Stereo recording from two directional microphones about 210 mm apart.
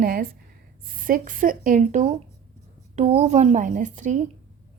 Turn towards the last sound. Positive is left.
turn(degrees=-35)  # may be behind; listen again after turning